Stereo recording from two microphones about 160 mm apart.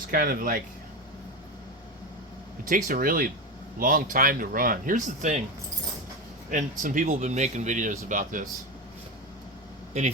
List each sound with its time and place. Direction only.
0.1 s speech: 65° right (ahead or behind)
2.6 s speech: 55° right (ahead or behind)
6.5 s speech: 55° right (ahead or behind)